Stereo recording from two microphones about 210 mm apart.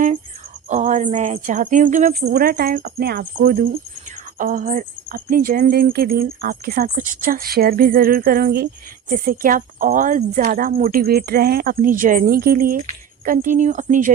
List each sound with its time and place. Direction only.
0.7 s speech: 35° right (ahead or behind)